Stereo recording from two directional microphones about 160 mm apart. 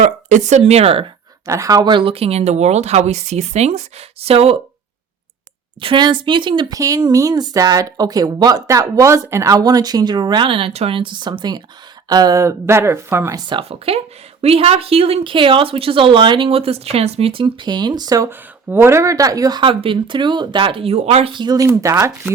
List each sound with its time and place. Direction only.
0.0 s speech: 50° right (ahead or behind)
1.5 s speech: 20° right (ahead or behind); by 4.5 s 40° right (ahead or behind)
5.8 s speech: 30° right (ahead or behind)
13.5 s speech: 35° right (ahead or behind); by 22.3 s 20° right (ahead or behind)